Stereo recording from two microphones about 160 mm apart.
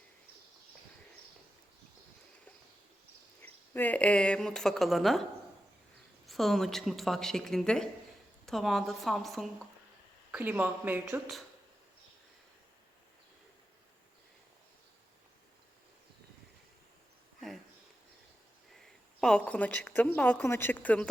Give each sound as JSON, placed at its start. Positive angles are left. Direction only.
{"t": 3.4, "sound": "speech", "side_deg": 10}
{"t": 6.2, "sound": "a woman's voice", "side_deg": 0}
{"t": 10.3, "sound": "speech", "side_deg": -10}
{"t": 18.7, "sound": "a woman's voice", "side_deg": 5}